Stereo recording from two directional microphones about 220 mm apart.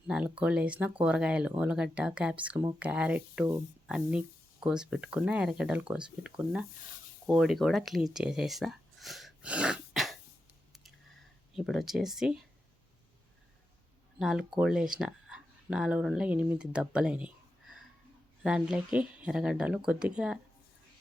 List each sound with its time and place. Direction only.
0.1 s speech: 5° right (ahead or behind)
11.5 s speech: centre (ahead or behind)
14.2 s speech: centre (ahead or behind)